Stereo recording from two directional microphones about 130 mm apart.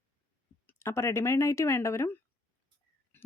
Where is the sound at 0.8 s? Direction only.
20° left (ahead or behind).